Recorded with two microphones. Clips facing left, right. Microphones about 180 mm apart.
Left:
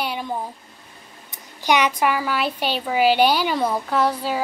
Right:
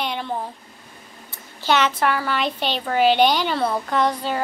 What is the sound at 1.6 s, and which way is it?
A woman's voice, 15° left (ahead or behind).